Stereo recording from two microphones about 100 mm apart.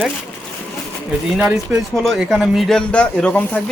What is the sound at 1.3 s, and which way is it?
Speech, 10° right (ahead or behind).